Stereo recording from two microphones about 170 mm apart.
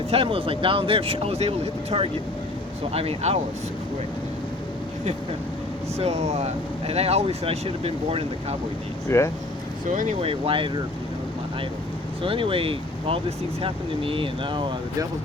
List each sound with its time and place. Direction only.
0.1 s speech: 35° right (ahead or behind)
6.0 s speech: 40° right (ahead or behind)
9.0 s speech: 15° left (ahead or behind)
9.9 s speech: 45° right (ahead or behind); by 10.7 s 30° right (ahead or behind)
12.2 s speech: 30° right (ahead or behind)